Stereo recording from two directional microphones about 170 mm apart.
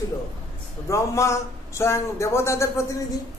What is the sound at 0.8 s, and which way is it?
A man's voice, 15° left (ahead or behind).